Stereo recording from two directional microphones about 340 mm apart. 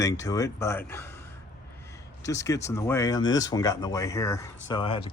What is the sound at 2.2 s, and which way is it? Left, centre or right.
Speech, centre.